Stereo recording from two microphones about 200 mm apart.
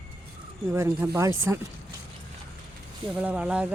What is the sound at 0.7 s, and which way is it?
Speech, 15° right (ahead or behind).